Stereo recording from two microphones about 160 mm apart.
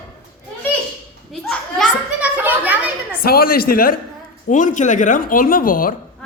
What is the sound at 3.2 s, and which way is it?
Speech, 70° left (ahead or behind).